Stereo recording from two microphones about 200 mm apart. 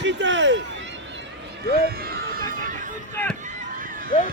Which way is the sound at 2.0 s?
50° right (ahead or behind).